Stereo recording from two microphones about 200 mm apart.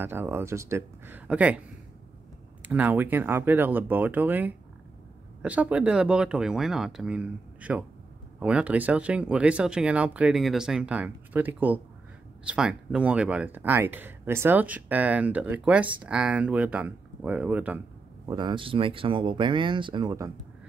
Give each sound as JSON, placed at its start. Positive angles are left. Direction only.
{"t": 0.0, "sound": "speech", "side_deg": -10}
{"t": 2.6, "sound": "speech", "side_deg": -10}
{"t": 18.2, "sound": "speech", "side_deg": -20}